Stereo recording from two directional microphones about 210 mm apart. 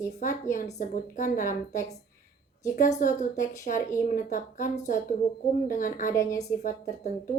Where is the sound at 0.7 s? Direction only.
40° left (ahead or behind).